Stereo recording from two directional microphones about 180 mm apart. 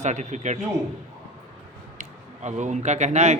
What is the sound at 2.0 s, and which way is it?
Speech, 40° right (ahead or behind).